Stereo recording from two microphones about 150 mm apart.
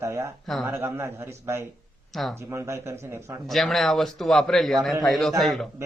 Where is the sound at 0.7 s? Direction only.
15° right (ahead or behind).